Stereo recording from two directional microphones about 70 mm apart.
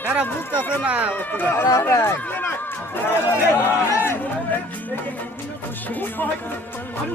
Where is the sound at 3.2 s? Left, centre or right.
Left.